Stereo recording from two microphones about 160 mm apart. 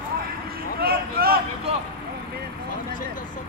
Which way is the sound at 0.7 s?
70° right (ahead or behind).